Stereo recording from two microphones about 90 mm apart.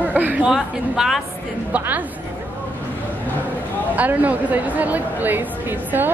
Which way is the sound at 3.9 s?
20° right (ahead or behind).